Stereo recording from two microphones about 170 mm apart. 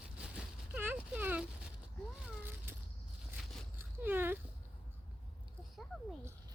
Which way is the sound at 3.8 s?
10° right (ahead or behind).